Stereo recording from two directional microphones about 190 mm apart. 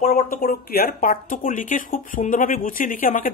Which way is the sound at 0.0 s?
40° left (ahead or behind).